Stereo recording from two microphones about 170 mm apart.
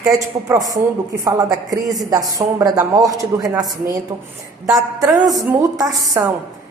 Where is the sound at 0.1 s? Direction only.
20° right (ahead or behind).